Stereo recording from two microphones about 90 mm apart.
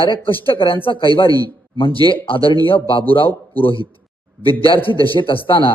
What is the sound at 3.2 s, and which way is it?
Speech, 20° left (ahead or behind).